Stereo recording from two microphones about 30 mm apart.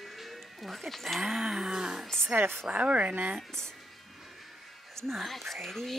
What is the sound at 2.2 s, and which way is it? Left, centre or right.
Speech, right.